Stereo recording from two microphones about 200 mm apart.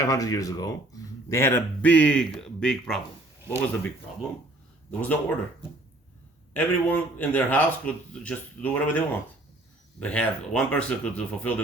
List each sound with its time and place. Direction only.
0.0 s speech: 15° left (ahead or behind)
6.5 s speech: 10° left (ahead or behind)